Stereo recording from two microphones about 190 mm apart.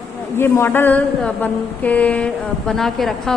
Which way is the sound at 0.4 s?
10° left (ahead or behind).